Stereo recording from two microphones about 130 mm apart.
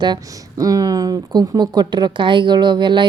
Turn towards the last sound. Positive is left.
turn(degrees=-35)  # may be behind; listen again after turning